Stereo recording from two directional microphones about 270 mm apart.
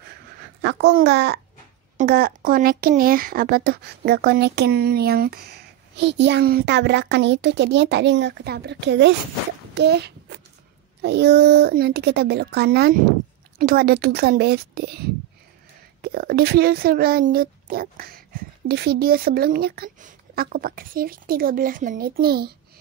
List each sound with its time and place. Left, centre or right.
0.6 s speech: right
9.8 s a sound: right
11.0 s speech: right